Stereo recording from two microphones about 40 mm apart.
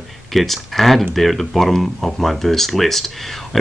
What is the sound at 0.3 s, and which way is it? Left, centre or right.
Speech, centre.